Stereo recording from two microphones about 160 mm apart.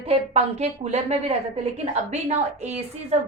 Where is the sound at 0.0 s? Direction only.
40° right (ahead or behind).